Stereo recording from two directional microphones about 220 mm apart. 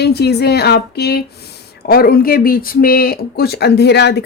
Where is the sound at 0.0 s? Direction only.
45° left (ahead or behind).